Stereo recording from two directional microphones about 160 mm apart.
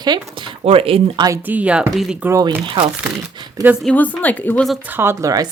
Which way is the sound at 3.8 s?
5° left (ahead or behind).